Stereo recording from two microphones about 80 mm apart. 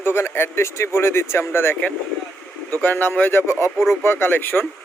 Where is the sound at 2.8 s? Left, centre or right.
Left.